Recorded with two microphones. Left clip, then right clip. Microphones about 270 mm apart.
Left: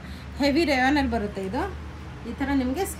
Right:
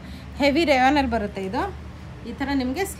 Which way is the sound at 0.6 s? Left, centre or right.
Right.